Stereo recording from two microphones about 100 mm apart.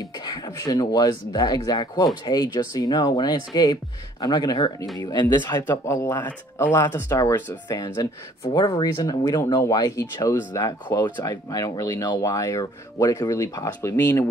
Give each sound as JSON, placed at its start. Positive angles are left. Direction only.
{"t": 0.2, "sound": "speech", "side_deg": 45}
{"t": 5.7, "sound": "speech", "side_deg": 30}
{"t": 7.1, "sound": "speech", "side_deg": 35}